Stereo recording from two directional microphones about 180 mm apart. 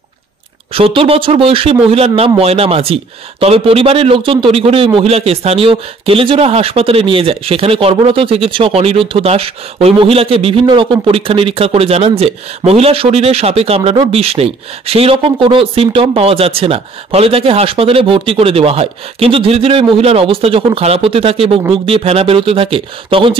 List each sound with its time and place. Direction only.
0.7 s speech: 30° right (ahead or behind)